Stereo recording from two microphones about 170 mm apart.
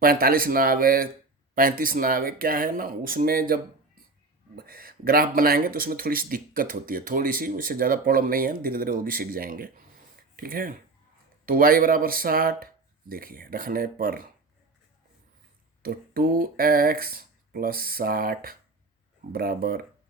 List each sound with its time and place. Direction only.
0.0 s speech: 60° right (ahead or behind)
15.8 s speech: 60° right (ahead or behind)